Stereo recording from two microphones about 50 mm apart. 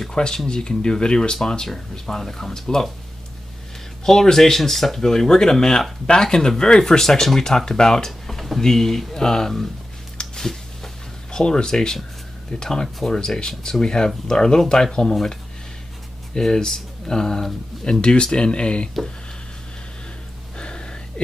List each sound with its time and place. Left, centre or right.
0.0 s speech: centre
4.0 s speech: centre
10.1 s a sound: centre
11.3 s speech: centre
16.3 s speech: centre
18.0 s speech: centre
20.5 s a sound: centre